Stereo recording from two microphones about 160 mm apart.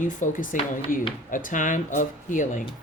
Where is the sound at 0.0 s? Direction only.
55° left (ahead or behind).